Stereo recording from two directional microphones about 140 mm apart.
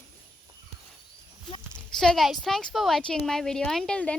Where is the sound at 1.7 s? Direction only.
5° left (ahead or behind).